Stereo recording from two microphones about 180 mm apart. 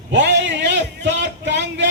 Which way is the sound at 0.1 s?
80° right.